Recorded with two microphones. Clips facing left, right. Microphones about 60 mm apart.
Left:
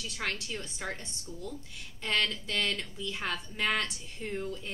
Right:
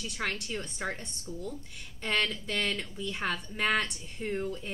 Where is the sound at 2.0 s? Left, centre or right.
Centre.